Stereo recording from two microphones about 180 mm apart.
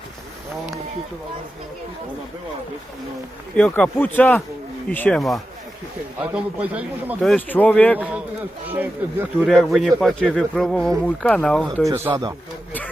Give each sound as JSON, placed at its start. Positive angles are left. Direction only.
{"t": 3.6, "sound": "a man's voice", "side_deg": 10}
{"t": 8.7, "sound": "speech", "side_deg": -10}
{"t": 9.5, "sound": "speech", "side_deg": 0}
{"t": 11.9, "sound": "speech", "side_deg": -15}